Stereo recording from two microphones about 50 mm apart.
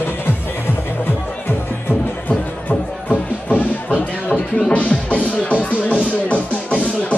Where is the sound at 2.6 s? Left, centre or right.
Left.